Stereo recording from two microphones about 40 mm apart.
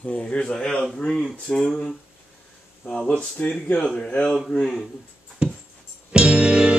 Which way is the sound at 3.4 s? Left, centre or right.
Left.